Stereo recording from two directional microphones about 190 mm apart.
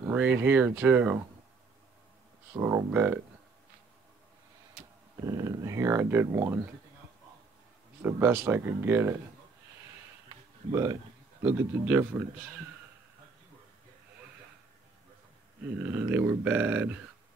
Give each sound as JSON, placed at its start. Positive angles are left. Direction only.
{"t": 0.0, "sound": "speech", "side_deg": -10}
{"t": 2.5, "sound": "speech", "side_deg": -15}
{"t": 5.2, "sound": "speech", "side_deg": -20}
{"t": 8.0, "sound": "speech", "side_deg": -10}
{"t": 10.2, "sound": "a sound", "side_deg": -15}
{"t": 11.4, "sound": "speech", "side_deg": -15}
{"t": 15.8, "sound": "speech", "side_deg": -10}